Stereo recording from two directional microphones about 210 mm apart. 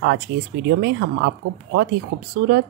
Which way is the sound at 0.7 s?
50° right (ahead or behind).